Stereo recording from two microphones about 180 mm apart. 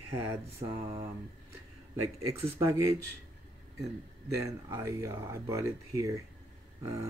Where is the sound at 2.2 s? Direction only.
15° right (ahead or behind).